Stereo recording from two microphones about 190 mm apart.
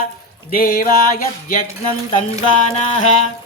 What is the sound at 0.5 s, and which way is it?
Music, 50° left (ahead or behind).